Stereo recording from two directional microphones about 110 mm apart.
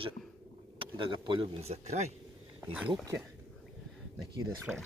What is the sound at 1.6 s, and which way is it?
Speech, 80° right.